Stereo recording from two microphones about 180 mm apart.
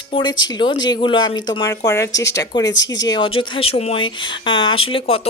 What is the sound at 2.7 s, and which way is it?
Speech, 90° left.